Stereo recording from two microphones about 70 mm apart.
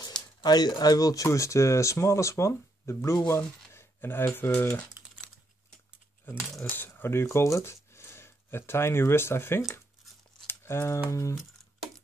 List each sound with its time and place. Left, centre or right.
0.4 s speech: left
3.7 s a sound: left
6.3 s speech: left
10.4 s crumpling: left
11.1 s speech: left